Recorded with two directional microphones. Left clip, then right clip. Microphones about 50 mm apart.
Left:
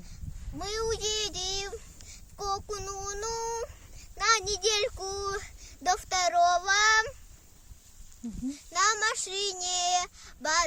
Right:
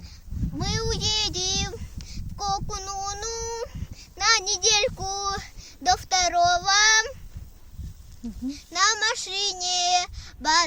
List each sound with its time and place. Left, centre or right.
0.6 s child singing: left
8.4 s child singing: left